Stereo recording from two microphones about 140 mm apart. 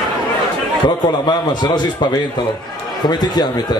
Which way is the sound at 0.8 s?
30° left (ahead or behind).